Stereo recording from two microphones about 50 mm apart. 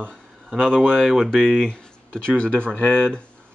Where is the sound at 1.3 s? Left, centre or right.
Right.